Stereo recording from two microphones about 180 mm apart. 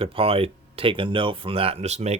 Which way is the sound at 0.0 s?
30° right (ahead or behind).